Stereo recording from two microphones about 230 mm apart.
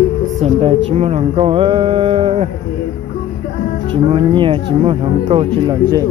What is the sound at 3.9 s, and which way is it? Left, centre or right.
Speech, right.